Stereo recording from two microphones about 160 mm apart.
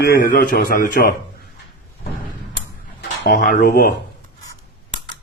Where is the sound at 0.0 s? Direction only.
70° left (ahead or behind).